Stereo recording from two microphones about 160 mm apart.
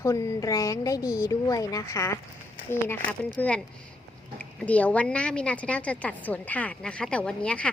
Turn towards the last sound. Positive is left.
turn(degrees=5)  # may be behind; listen again after turning